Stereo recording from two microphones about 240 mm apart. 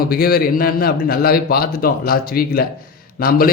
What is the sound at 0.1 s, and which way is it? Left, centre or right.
Speech, left.